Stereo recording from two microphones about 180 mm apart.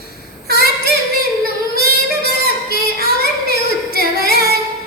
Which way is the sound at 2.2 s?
60° left (ahead or behind).